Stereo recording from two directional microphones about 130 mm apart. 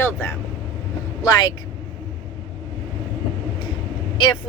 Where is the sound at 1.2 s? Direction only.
35° left (ahead or behind).